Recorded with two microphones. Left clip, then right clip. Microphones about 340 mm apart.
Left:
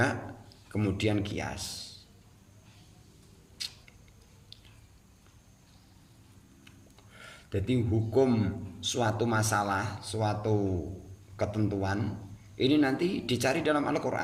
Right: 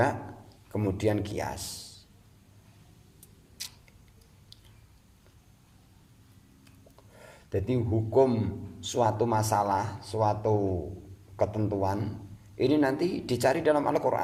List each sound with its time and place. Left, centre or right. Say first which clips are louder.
0.8 s speech: right 2 dB; centre
7.2 s a man's voice: right 3 dB; centre